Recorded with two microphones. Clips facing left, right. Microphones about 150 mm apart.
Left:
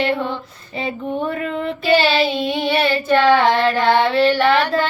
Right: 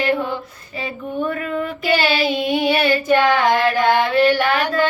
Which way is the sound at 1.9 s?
15° right (ahead or behind).